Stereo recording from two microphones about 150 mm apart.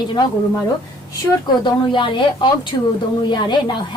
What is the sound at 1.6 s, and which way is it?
A woman's voice, 30° left (ahead or behind).